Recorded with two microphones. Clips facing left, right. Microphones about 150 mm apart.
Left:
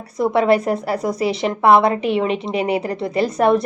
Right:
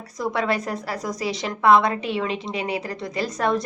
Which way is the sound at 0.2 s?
30° left (ahead or behind).